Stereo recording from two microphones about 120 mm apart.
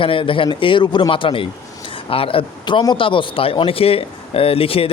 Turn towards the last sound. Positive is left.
turn(degrees=50)  # may be behind; listen again after turning